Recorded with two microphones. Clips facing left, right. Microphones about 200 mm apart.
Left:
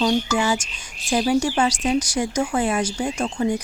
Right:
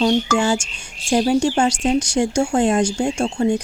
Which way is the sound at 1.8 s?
30° right (ahead or behind).